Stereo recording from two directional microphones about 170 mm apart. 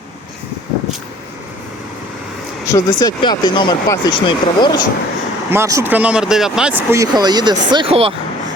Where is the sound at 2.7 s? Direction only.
25° left (ahead or behind).